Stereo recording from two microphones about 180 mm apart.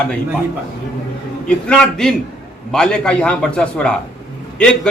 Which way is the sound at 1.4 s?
5° left (ahead or behind).